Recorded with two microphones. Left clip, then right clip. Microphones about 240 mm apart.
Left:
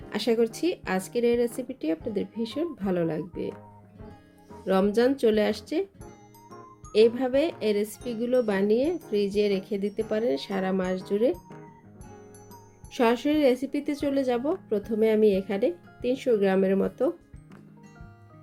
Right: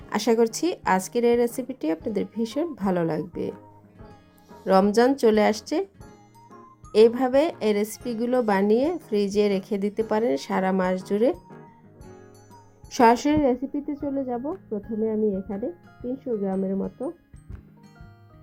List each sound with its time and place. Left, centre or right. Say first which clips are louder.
0.3 s a woman's voice: right 3 dB; centre
4.5 s a woman's voice: right 5 dB; centre
9.6 s speech: right 2 dB; right
10.1 s a woman's voice: right 3 dB; centre
13.4 s a woman's voice: even; centre
14.2 s speech: left 3 dB; centre